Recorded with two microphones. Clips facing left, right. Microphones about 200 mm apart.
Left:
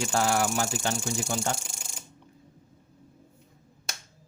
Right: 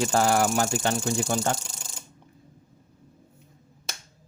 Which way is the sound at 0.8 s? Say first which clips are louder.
Right 5 dB; 60° right (ahead or behind).